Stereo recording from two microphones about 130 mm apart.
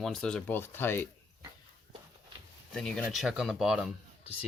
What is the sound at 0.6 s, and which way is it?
Speech, 15° left (ahead or behind).